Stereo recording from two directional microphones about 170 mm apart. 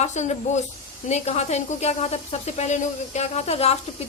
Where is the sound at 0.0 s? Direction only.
45° left (ahead or behind).